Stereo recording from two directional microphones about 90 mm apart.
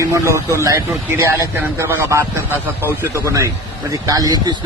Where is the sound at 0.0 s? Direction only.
35° right (ahead or behind).